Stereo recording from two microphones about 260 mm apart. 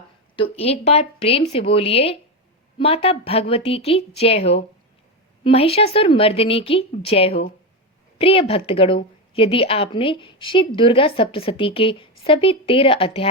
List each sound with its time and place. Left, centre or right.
0.3 s a woman's voice: left